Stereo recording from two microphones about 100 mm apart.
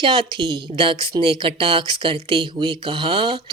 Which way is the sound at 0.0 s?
55° right (ahead or behind).